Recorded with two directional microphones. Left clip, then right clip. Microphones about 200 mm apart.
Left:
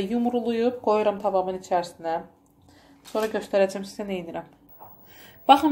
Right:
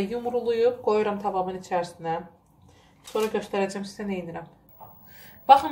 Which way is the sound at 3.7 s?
40° left (ahead or behind).